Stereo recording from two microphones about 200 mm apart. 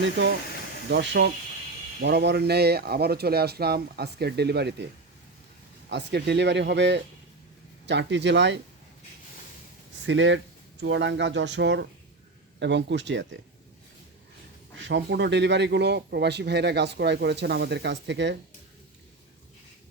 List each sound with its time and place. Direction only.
0.9 s speech: 60° right (ahead or behind)
5.9 s speech: 60° right (ahead or behind)
10.0 s speech: 65° right (ahead or behind)
14.8 s speech: 65° right (ahead or behind)